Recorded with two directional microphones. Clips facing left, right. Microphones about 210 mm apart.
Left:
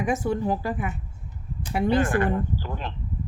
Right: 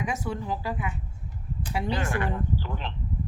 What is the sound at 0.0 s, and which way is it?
A woman's voice, 50° left (ahead or behind).